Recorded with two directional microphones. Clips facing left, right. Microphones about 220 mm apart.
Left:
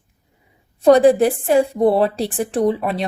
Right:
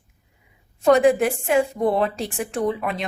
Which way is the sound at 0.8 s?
35° left (ahead or behind).